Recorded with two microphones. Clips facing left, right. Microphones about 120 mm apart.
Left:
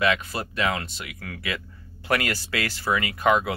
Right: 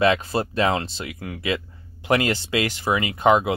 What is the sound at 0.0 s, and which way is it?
Speech, 30° right (ahead or behind).